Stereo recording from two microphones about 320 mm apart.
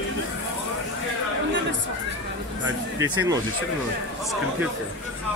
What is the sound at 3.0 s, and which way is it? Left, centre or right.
Speech, centre.